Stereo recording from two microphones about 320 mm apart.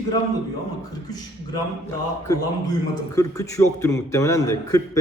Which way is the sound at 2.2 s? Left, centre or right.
Centre.